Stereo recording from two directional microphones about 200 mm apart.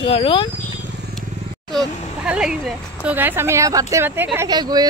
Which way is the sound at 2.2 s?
5° right (ahead or behind).